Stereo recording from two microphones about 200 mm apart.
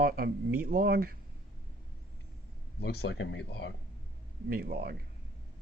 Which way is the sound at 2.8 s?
55° left (ahead or behind).